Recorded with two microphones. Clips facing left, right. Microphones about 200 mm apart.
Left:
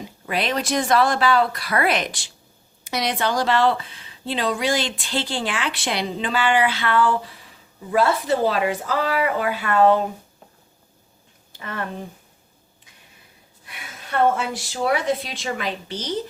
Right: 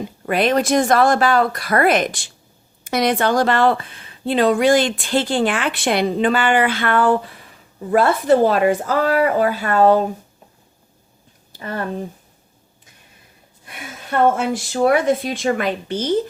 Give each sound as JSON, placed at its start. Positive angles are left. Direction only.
{"t": 0.3, "sound": "a woman's voice", "side_deg": -50}
{"t": 11.5, "sound": "speech", "side_deg": -40}
{"t": 13.7, "sound": "a woman's voice", "side_deg": -50}